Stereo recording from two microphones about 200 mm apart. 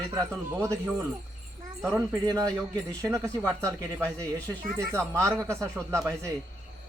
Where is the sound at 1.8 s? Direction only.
15° right (ahead or behind).